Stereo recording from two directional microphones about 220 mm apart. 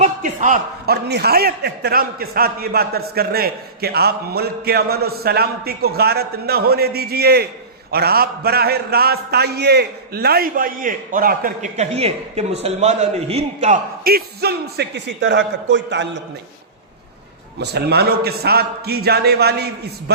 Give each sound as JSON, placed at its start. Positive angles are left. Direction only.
{"t": 0.0, "sound": "a man's voice", "side_deg": -35}
{"t": 17.6, "sound": "a man's voice", "side_deg": -50}